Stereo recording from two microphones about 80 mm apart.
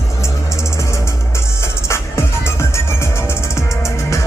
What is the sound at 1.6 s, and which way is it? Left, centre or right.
Music, left.